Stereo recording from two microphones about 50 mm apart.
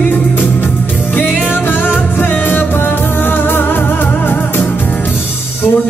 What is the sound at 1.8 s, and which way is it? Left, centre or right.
Music, left.